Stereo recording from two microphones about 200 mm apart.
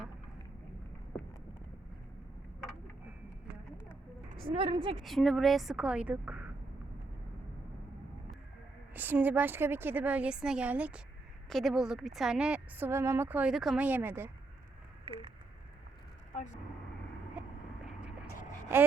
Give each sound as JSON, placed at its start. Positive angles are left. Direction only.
{"t": 4.5, "sound": "a woman's voice", "side_deg": -25}
{"t": 5.0, "sound": "a woman's voice", "side_deg": 0}
{"t": 8.9, "sound": "a woman's voice", "side_deg": -10}
{"t": 15.0, "sound": "a sound", "side_deg": -25}
{"t": 16.3, "sound": "speech", "side_deg": 35}